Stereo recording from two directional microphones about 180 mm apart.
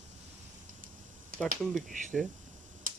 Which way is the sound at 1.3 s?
50° right (ahead or behind).